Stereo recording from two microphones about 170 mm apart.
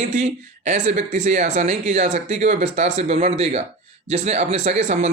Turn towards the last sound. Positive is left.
turn(degrees=-45)  # may be behind; listen again after turning